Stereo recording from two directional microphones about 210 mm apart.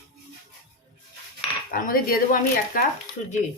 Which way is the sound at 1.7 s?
40° left (ahead or behind).